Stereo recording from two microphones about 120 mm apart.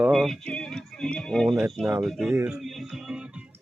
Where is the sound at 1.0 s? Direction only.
5° left (ahead or behind).